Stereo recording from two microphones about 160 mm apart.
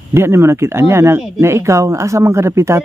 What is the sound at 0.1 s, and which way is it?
A man's voice, 15° right (ahead or behind).